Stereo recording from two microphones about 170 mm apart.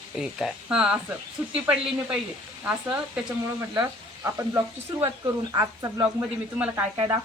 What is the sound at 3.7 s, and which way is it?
Speech, 15° right (ahead or behind).